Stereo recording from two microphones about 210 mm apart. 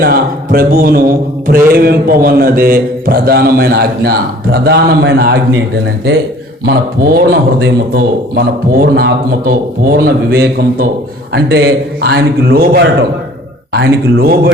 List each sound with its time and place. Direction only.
0.0 s a man's voice: 45° right (ahead or behind)
6.7 s a man's voice: 45° right (ahead or behind)